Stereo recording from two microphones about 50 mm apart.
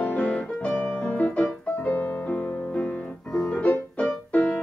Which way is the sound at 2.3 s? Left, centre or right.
Left.